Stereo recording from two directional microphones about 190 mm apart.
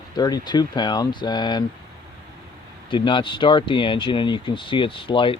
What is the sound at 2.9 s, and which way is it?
Speech, 25° left (ahead or behind).